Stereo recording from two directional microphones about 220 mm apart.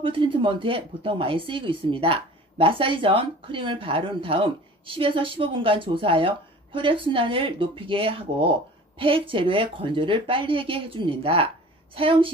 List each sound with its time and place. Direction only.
0.0 s speech: 25° right (ahead or behind)